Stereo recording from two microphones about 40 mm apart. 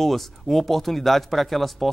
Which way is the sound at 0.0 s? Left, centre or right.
Centre.